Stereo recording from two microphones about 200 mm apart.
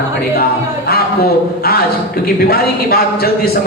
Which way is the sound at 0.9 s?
50° left (ahead or behind).